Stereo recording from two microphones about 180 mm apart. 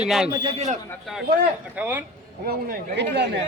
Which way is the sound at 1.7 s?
10° right (ahead or behind).